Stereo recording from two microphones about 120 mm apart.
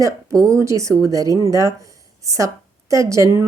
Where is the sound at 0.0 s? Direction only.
25° right (ahead or behind).